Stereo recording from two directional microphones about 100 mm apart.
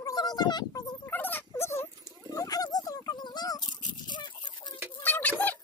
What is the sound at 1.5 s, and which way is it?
Dog, 25° left (ahead or behind).